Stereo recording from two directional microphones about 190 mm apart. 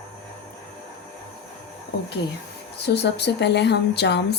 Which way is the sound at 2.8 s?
60° left (ahead or behind).